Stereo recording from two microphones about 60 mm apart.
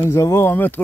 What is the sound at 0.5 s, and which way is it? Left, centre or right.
Speech, left.